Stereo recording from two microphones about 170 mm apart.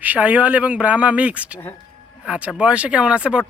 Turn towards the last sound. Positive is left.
turn(degrees=-5)  # may be behind; listen again after turning